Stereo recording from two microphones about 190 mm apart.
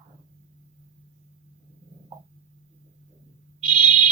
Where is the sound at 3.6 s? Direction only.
45° right (ahead or behind).